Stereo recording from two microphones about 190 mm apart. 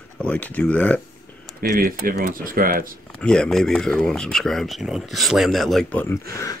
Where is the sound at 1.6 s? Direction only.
50° right (ahead or behind).